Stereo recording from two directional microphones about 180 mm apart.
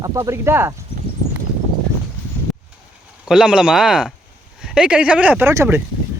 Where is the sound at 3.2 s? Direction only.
5° right (ahead or behind).